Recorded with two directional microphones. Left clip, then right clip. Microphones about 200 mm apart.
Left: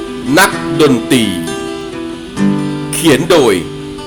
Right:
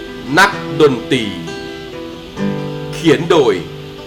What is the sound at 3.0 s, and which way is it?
Speech, 35° left (ahead or behind).